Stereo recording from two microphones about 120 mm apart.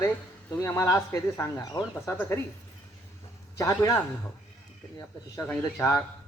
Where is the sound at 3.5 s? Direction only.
25° left (ahead or behind).